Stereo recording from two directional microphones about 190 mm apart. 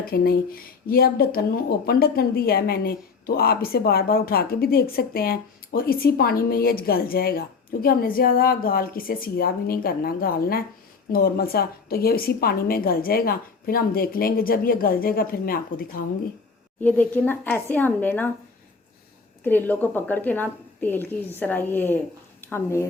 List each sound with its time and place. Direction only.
0.0 s a woman's voice: 50° left (ahead or behind)
16.8 s a woman's voice: 10° left (ahead or behind)
19.5 s a woman's voice: 10° left (ahead or behind)